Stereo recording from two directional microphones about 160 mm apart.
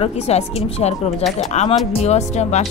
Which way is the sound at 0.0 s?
40° left (ahead or behind).